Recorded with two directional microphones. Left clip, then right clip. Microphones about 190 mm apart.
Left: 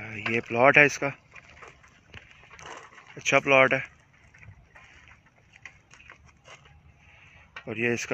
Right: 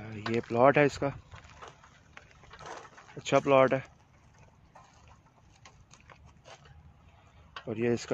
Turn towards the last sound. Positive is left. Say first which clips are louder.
# left 3 dB
turn(degrees=-10)  # may be behind; listen again after turning